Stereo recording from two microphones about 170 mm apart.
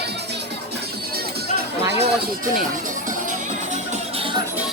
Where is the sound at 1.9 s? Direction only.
80° right.